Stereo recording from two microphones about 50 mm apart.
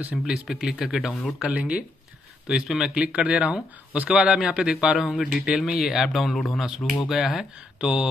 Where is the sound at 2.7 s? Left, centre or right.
Centre.